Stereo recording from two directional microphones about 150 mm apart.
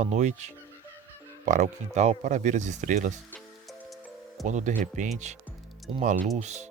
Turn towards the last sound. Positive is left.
turn(degrees=-50)  # may be behind; listen again after turning